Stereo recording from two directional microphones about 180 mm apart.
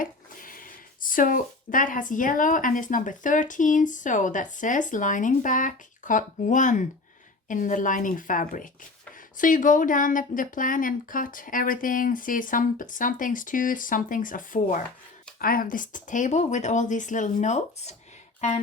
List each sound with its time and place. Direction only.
0.0 s speech: 50° left (ahead or behind)